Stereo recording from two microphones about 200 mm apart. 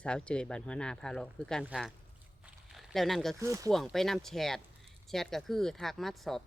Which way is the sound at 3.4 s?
15° right (ahead or behind).